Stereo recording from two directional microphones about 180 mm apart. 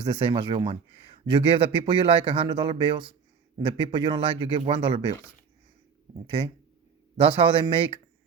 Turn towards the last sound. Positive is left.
turn(degrees=-30)  # may be behind; listen again after turning